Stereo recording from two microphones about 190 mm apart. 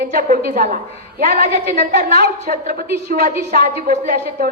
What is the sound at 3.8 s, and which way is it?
Speech, 40° right (ahead or behind).